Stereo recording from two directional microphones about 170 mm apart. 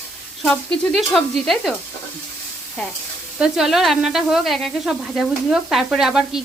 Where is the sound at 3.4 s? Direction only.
Centre (ahead or behind).